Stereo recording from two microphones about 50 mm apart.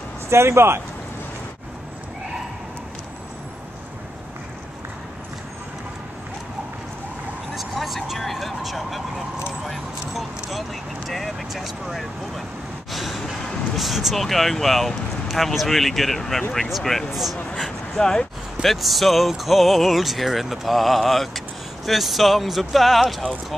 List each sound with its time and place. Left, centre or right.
0.3 s speech: right
7.5 s vehicle: centre
12.9 s a sound: centre
13.7 s speech: centre
17.6 s speech: centre
18.6 s speech: centre